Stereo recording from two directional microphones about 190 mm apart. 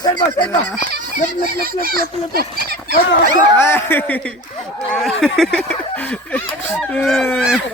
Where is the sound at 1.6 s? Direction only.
50° right (ahead or behind).